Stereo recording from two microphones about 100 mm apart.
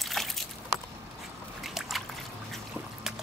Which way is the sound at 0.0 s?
Centre (ahead or behind).